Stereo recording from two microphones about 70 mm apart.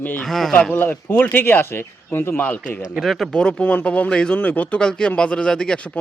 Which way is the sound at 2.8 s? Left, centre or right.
Centre.